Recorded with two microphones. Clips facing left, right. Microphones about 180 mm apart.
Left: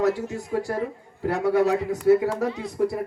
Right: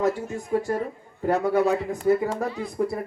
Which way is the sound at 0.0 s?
80° left.